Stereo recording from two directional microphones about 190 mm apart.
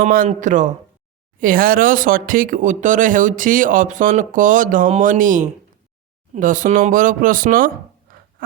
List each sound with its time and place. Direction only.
0.0 s speech: 45° right (ahead or behind)